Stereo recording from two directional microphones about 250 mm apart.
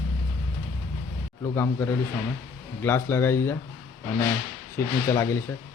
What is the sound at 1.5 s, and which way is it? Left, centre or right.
Speech, centre.